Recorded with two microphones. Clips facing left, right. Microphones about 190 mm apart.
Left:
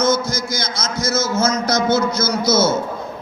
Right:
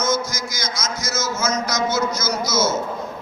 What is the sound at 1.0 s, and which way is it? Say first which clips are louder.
Speech: left 8 dB; 60° left (ahead or behind).